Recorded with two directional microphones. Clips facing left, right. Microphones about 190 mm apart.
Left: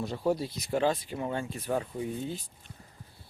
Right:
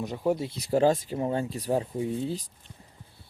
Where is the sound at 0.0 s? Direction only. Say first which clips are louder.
Right 2 dB; 15° right (ahead or behind).